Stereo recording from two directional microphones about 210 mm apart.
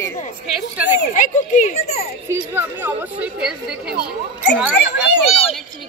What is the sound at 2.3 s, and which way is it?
Speech, 10° right (ahead or behind).